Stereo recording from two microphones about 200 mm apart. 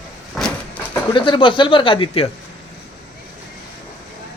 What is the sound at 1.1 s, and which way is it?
Speech, 25° left (ahead or behind).